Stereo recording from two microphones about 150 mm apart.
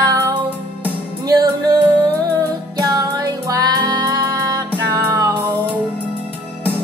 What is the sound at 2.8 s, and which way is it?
Music, 25° right (ahead or behind).